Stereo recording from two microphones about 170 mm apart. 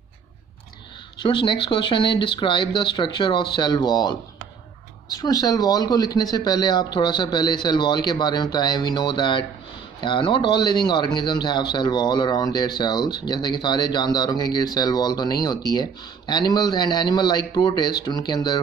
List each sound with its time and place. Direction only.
1.2 s speech: 30° left (ahead or behind)